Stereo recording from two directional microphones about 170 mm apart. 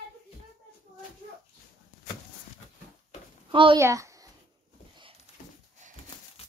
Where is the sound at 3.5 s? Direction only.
30° right (ahead or behind).